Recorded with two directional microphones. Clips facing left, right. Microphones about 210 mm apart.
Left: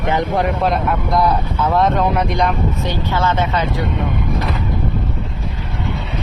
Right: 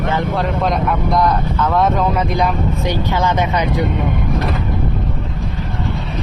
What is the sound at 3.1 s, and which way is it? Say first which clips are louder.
Speech: even; 15° right (ahead or behind).